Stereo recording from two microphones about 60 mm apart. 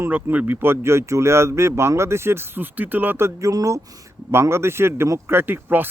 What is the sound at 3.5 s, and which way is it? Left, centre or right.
Speech, right.